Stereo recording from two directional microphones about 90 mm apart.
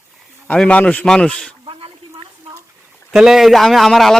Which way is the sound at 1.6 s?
80° right.